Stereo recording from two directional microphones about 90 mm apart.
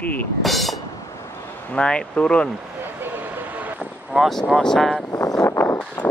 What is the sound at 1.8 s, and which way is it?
Speech, 10° left (ahead or behind).